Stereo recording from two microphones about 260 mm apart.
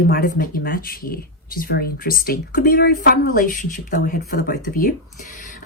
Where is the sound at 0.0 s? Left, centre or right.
Left.